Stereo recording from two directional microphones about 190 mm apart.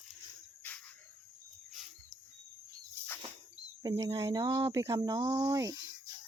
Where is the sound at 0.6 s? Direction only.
10° left (ahead or behind).